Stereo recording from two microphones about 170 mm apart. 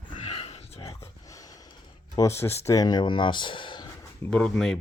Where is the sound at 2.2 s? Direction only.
15° left (ahead or behind).